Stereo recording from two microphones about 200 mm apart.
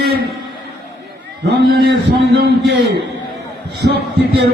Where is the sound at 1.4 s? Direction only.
55° right (ahead or behind).